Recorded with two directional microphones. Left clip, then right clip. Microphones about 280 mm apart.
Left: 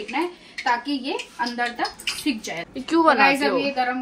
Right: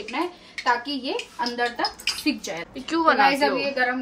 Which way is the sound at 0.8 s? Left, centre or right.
Right.